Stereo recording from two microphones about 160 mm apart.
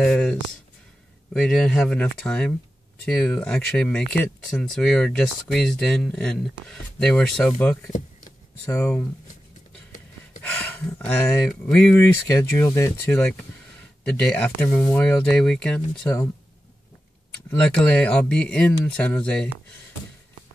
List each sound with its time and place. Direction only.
0.0 s speech: 5° left (ahead or behind)
8.7 s speech: 20° left (ahead or behind)
10.4 s speech: 10° left (ahead or behind)
12.3 s speech: 15° left (ahead or behind)
17.5 s speech: 5° left (ahead or behind)